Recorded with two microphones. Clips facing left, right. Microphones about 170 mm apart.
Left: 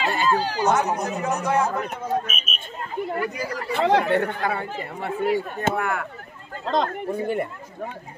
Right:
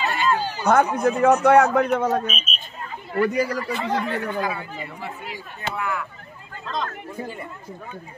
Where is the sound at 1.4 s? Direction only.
70° right (ahead or behind).